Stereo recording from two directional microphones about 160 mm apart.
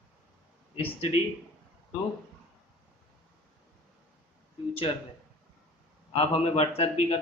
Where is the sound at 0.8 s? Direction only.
35° left (ahead or behind).